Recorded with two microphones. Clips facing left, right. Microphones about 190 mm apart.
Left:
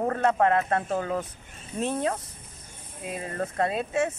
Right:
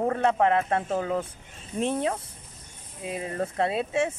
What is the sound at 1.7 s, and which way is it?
Speech, 20° right (ahead or behind).